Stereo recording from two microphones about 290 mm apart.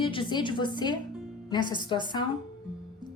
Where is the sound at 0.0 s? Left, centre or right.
Centre.